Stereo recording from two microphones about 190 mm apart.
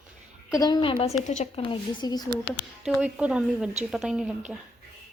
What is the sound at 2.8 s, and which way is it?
A woman's voice, 5° right (ahead or behind).